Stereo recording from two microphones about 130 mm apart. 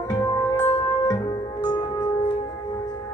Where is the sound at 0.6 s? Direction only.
30° left (ahead or behind).